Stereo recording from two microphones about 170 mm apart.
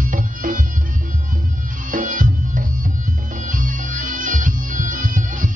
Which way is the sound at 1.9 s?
50° right (ahead or behind).